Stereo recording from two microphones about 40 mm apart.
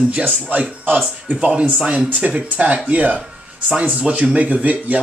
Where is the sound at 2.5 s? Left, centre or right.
Right.